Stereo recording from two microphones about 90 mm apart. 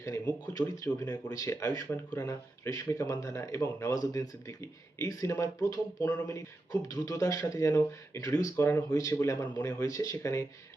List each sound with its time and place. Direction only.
0.0 s speech: 40° left (ahead or behind)
8.5 s speech: 30° left (ahead or behind)
8.9 s speech: 40° left (ahead or behind)